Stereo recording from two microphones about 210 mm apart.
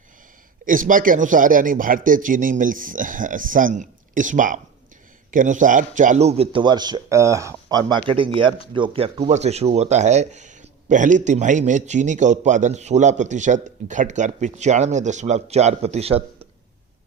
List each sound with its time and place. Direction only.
0.6 s a man's voice: 40° right (ahead or behind)